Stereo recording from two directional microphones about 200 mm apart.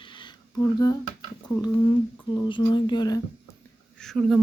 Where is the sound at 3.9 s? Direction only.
Centre (ahead or behind).